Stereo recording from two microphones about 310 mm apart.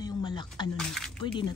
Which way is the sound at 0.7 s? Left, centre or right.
Centre.